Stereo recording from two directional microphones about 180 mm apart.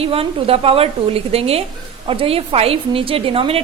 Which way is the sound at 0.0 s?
30° right (ahead or behind).